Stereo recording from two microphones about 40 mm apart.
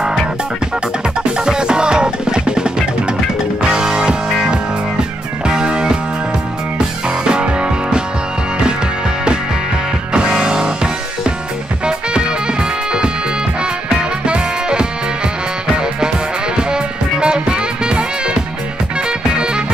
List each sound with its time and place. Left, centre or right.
1.3 s music: right
5.4 s music: right
7.2 s music: right
10.1 s music: right